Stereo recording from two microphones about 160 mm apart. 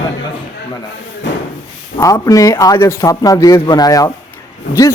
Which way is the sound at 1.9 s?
20° left (ahead or behind).